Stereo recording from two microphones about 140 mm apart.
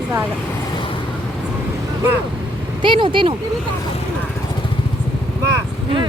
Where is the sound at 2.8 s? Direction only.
35° right (ahead or behind).